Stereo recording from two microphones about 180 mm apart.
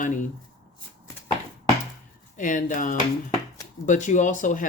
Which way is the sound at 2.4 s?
45° left (ahead or behind).